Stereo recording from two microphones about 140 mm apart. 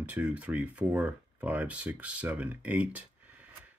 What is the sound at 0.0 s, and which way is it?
Speech, 10° right (ahead or behind).